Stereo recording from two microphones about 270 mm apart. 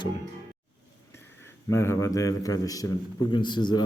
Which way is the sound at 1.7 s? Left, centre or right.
Centre.